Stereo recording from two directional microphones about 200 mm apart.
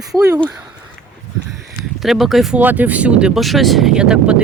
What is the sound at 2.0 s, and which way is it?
Speech, centre (ahead or behind).